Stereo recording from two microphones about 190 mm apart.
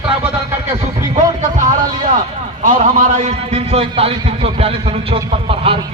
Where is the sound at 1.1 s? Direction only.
40° right (ahead or behind).